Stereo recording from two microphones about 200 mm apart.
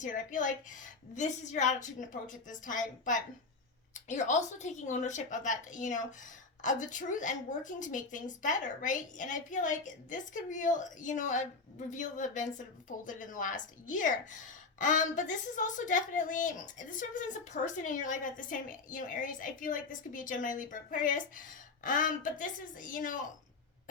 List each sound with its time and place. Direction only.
0.0 s a woman's voice: 40° left (ahead or behind)